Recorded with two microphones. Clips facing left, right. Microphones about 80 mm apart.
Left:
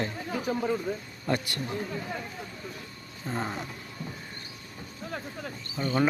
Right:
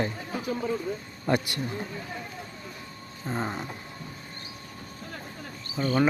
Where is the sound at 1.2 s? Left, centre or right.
Centre.